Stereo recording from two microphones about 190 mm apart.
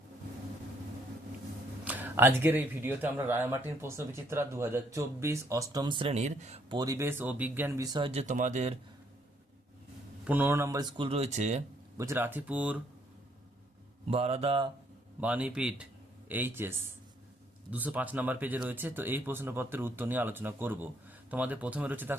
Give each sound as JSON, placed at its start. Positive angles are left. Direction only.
{"t": 1.8, "sound": "speech", "side_deg": -10}
{"t": 6.7, "sound": "speech", "side_deg": -20}
{"t": 8.0, "sound": "speech", "side_deg": -35}
{"t": 10.2, "sound": "speech", "side_deg": -10}
{"t": 11.9, "sound": "speech", "side_deg": -15}
{"t": 14.1, "sound": "speech", "side_deg": -35}
{"t": 15.2, "sound": "a man's voice", "side_deg": -5}